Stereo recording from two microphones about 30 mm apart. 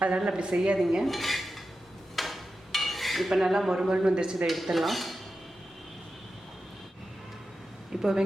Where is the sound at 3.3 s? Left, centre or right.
Centre.